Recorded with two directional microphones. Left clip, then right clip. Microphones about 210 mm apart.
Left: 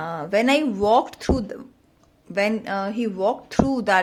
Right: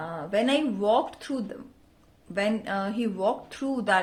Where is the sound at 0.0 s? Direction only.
35° left (ahead or behind).